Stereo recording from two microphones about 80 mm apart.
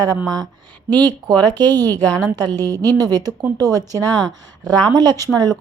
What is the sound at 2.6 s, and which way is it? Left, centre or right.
A woman's voice, right.